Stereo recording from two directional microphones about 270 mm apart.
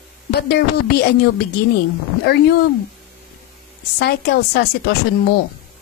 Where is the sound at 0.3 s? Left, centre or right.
Left.